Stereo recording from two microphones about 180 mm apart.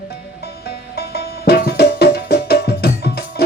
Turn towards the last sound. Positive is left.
turn(degrees=60)  # may be behind; listen again after turning